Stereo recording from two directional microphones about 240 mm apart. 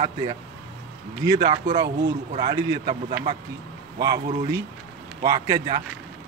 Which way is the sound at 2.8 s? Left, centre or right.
Right.